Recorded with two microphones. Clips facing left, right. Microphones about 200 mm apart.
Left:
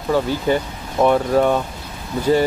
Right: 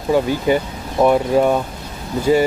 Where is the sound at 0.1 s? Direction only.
15° right (ahead or behind).